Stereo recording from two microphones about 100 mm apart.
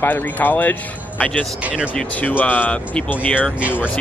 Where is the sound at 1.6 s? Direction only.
10° right (ahead or behind).